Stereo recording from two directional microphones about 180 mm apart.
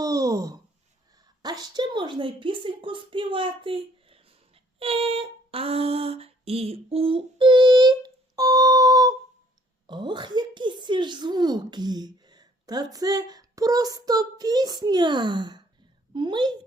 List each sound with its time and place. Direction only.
0.0 s a sound: 20° right (ahead or behind)
1.4 s a woman's voice: 20° right (ahead or behind)
4.8 s female singing: 30° right (ahead or behind)
9.8 s a woman's voice: 25° right (ahead or behind)